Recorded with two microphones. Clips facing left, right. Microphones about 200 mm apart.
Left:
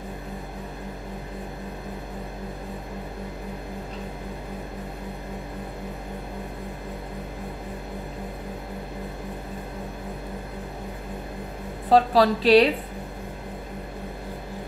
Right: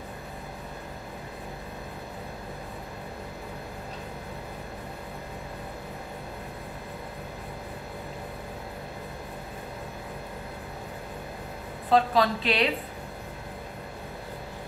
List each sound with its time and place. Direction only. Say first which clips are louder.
11.9 s a woman's voice: left 4 dB; 35° left (ahead or behind)